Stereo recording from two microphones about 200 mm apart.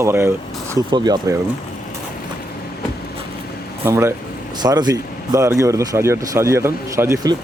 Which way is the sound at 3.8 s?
10° right (ahead or behind).